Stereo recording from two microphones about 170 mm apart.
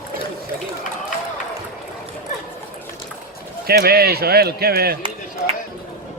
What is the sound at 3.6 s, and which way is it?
Speech, 65° right (ahead or behind).